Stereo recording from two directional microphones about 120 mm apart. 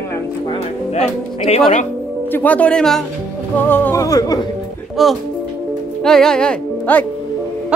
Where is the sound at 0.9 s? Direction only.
65° left (ahead or behind).